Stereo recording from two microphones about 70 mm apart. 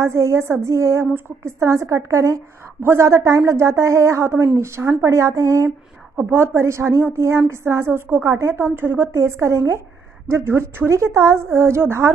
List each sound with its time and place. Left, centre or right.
0.0 s a woman's voice: right
6.1 s a woman's voice: right